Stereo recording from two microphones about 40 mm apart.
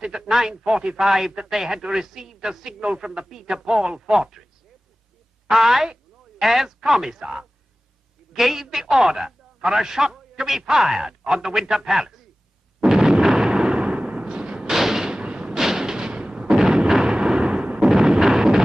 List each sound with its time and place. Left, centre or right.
0.0 s a man's voice: centre
5.5 s a man's voice: centre
6.8 s a man's voice: centre
12.8 s artillery fire: centre
14.2 s a sound: right
14.7 s artillery fire: centre
15.5 s artillery fire: centre